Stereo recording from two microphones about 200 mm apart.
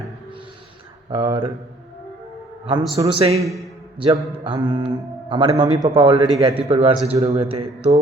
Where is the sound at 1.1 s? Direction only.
25° right (ahead or behind).